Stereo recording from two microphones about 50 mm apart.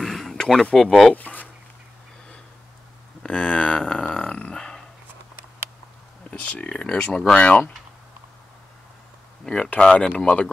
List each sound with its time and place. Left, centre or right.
0.0 s a sound: centre
0.7 s speech: centre
1.1 s speech: left
3.2 s speech: centre
4.0 s a sound: left
4.6 s dog: centre
6.3 s speech: left
9.4 s speech: centre